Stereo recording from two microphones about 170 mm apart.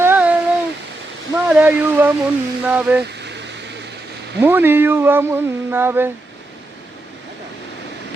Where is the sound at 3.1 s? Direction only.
85° right.